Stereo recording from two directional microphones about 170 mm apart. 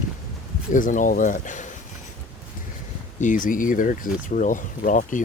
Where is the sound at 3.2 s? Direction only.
50° left (ahead or behind).